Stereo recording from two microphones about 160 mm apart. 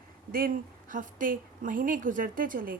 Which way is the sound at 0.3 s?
65° right (ahead or behind).